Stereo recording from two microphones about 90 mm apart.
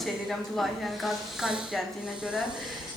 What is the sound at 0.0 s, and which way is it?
A woman's voice, centre (ahead or behind).